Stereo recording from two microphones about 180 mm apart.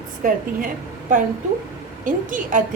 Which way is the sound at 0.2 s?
50° right (ahead or behind).